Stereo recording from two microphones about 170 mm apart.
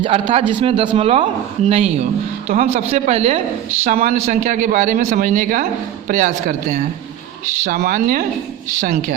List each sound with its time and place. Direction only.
0.0 s speech: 30° right (ahead or behind)
3.8 s speech: 50° right (ahead or behind)